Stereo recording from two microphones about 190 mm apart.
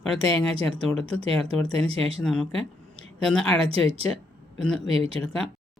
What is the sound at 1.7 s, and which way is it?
Speech, 30° right (ahead or behind).